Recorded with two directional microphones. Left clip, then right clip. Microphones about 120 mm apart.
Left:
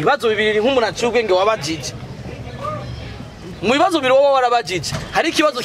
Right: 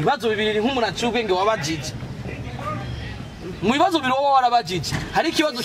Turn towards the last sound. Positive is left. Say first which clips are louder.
# left 4 dB
turn(degrees=40)  # may be behind; listen again after turning